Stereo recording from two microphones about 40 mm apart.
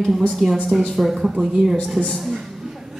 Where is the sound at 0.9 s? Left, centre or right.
Centre.